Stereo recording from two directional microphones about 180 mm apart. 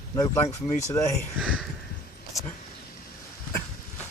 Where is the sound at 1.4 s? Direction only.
5° right (ahead or behind).